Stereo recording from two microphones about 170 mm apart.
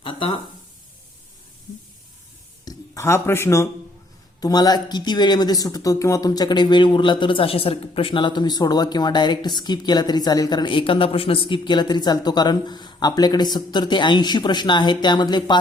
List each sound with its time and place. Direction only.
0.0 s speech: 30° left (ahead or behind)
2.6 s a sound: 20° left (ahead or behind)
4.4 s speech: 20° left (ahead or behind)